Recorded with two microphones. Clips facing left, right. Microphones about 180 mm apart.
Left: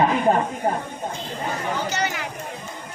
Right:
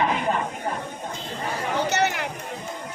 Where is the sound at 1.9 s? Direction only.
65° right (ahead or behind).